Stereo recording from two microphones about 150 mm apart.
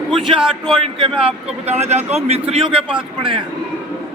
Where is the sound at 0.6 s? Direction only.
35° right (ahead or behind).